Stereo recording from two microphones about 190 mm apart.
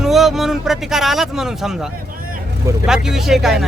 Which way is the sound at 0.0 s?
Centre (ahead or behind).